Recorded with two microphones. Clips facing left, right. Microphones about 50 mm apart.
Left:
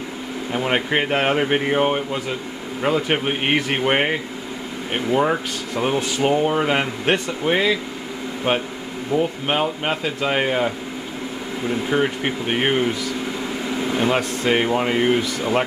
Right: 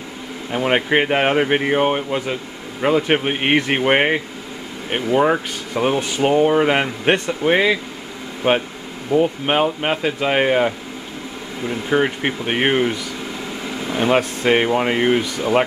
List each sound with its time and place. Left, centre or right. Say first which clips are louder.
0.5 s speech: right 3 dB; centre
11.9 s speech: right 4 dB; centre
13.9 s speech: right 5 dB; centre